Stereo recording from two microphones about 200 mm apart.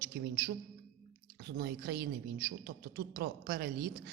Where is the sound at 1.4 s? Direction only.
55° right (ahead or behind).